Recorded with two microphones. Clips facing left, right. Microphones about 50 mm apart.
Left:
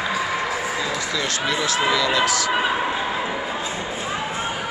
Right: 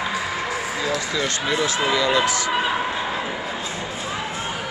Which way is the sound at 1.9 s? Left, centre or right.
Centre.